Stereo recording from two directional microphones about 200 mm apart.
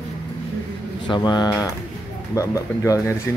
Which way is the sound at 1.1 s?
20° left (ahead or behind).